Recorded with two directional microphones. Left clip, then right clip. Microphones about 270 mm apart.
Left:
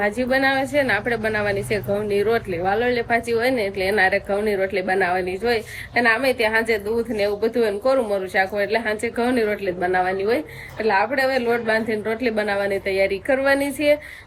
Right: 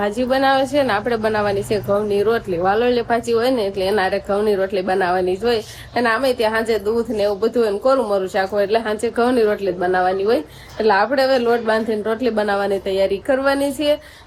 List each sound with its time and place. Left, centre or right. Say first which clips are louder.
0.0 s a woman's voice: right 2 dB; centre